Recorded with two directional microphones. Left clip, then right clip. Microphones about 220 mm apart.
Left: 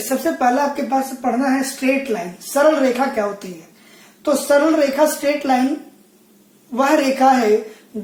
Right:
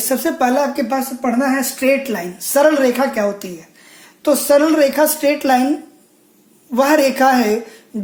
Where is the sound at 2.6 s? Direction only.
45° right (ahead or behind).